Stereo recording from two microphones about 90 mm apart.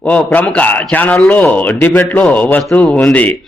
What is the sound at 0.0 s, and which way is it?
A man's voice, 15° left (ahead or behind).